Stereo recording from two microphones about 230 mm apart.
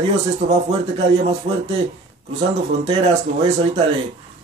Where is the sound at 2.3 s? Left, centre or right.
Right.